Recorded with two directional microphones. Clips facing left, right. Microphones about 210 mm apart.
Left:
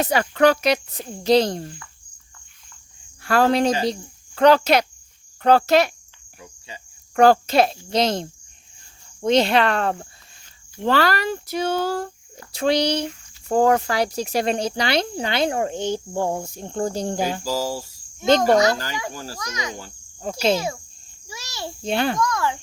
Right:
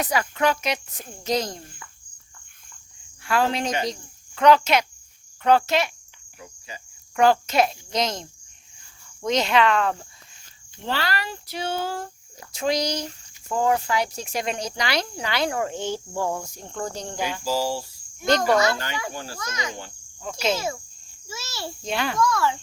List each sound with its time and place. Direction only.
0.0 s speech: 30° left (ahead or behind)
3.2 s speech: 40° left (ahead or behind)
7.2 s speech: 35° left (ahead or behind)
10.8 s speech: 45° left (ahead or behind); by 13.1 s 30° left (ahead or behind)
13.5 s speech: 40° left (ahead or behind)
18.2 s a child's voice: 25° left (ahead or behind)
18.7 s speech: 40° left (ahead or behind)
19.4 s speech: 15° left (ahead or behind)
19.8 s insect: 40° left (ahead or behind)
21.2 s a sound: 15° left (ahead or behind)
21.8 s speech: 30° left (ahead or behind)
22.2 s speech: 15° left (ahead or behind)